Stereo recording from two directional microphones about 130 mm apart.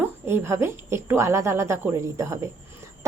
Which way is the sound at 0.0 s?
15° right (ahead or behind).